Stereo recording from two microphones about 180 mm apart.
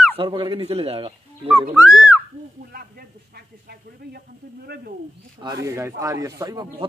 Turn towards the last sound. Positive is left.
turn(degrees=-20)  # may be behind; listen again after turning